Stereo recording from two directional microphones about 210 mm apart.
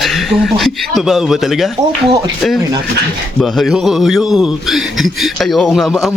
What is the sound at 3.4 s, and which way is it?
Speech, centre (ahead or behind).